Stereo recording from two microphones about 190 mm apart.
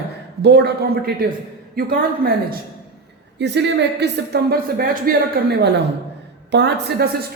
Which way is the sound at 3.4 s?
65° right (ahead or behind).